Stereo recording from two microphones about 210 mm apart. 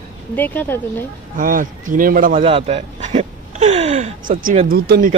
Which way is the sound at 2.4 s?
25° right (ahead or behind).